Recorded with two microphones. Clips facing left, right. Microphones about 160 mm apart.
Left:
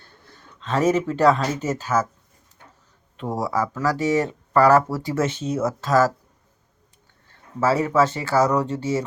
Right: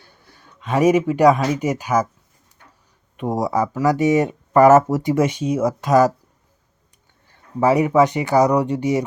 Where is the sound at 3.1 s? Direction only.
15° right (ahead or behind).